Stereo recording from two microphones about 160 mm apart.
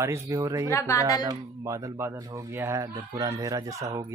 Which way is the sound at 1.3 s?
20° right (ahead or behind).